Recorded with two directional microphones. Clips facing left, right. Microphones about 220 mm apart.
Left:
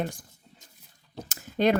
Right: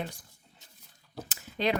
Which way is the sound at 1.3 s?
45° left (ahead or behind).